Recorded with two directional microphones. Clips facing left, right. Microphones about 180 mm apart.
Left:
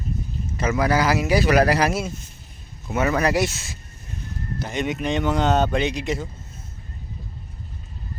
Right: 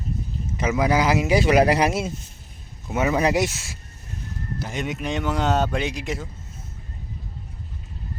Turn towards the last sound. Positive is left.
turn(degrees=-5)  # may be behind; listen again after turning